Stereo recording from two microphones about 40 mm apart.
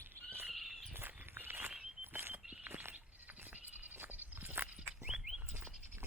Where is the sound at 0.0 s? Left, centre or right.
Right.